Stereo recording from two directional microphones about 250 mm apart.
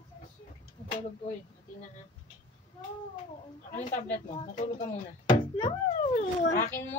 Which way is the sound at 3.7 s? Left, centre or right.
Left.